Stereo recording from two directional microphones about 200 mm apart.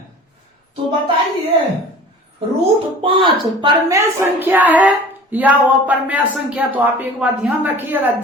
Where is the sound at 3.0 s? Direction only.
25° right (ahead or behind).